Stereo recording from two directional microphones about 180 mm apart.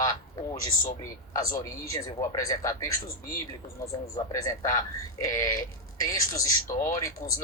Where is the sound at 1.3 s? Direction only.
20° left (ahead or behind).